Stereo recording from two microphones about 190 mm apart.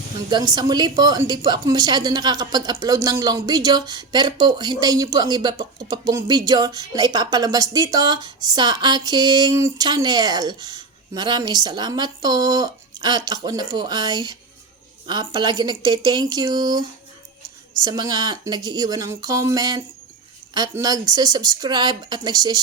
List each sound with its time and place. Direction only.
0.3 s a woman's voice: 20° right (ahead or behind)
17.8 s a woman's voice: 20° right (ahead or behind)